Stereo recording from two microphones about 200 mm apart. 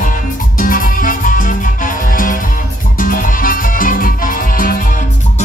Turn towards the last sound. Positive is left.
turn(degrees=45)  # may be behind; listen again after turning